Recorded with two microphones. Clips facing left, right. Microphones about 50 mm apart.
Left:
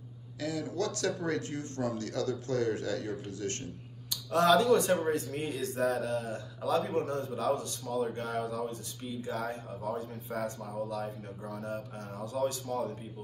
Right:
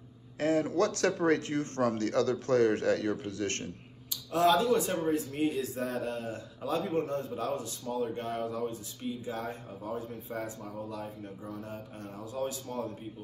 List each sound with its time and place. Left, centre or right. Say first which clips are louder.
0.4 s speech: right 6 dB; right
4.1 s speech: left 1 dB; centre